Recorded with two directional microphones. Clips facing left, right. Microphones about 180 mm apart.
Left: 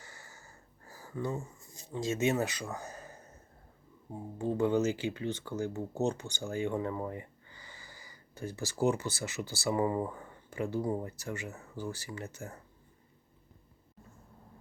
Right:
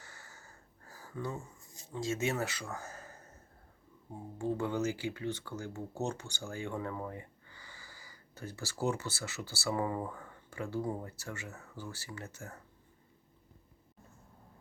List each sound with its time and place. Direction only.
0.0 s a sound: 10° left (ahead or behind)
1.9 s speech: 20° left (ahead or behind)
4.4 s speech: 20° left (ahead or behind)